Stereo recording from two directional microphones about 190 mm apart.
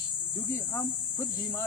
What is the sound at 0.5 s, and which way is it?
Speech, 15° left (ahead or behind).